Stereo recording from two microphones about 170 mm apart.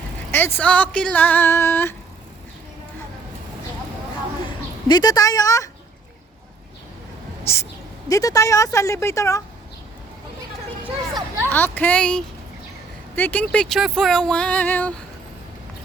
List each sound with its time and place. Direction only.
0.3 s speech: 15° left (ahead or behind)
4.9 s a woman's voice: 25° left (ahead or behind)
7.4 s a woman's voice: 15° left (ahead or behind)
11.4 s speech: 10° left (ahead or behind)